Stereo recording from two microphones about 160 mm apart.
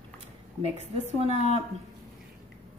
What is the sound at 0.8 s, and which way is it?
Speech, 40° right (ahead or behind).